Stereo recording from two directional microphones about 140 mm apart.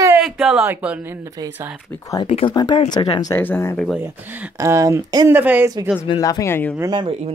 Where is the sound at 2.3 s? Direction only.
45° left (ahead or behind).